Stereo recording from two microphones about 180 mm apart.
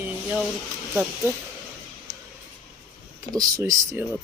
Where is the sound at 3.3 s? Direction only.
20° right (ahead or behind).